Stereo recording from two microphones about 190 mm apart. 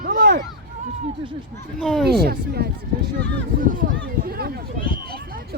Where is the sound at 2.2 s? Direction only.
55° right (ahead or behind).